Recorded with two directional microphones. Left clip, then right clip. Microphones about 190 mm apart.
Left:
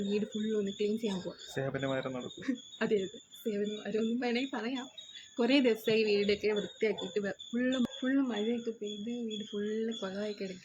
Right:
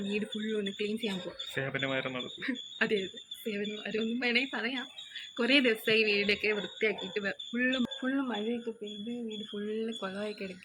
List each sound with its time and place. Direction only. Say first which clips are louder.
0.1 s speech: even; 10° left (ahead or behind)
1.5 s speech: right 2 dB; 5° right (ahead or behind)
2.4 s speech: right 4 dB; 15° left (ahead or behind)